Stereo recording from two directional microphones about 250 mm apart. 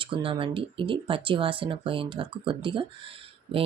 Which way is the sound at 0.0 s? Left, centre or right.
Right.